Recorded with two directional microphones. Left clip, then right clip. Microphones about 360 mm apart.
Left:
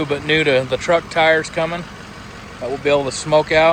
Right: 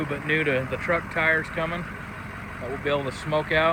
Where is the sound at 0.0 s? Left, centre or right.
Centre.